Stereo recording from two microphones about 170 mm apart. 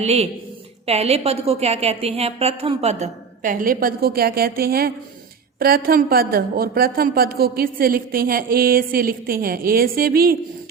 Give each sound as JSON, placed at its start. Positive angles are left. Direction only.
{"t": 0.0, "sound": "a woman's voice", "side_deg": -40}